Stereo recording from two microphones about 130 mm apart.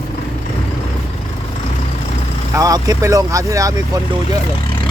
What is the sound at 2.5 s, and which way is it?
Speech, 30° right (ahead or behind).